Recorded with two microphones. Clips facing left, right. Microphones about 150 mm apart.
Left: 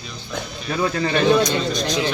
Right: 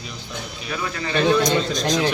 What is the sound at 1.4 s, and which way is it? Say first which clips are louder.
Speech: right 1 dB; 65° left (ahead or behind).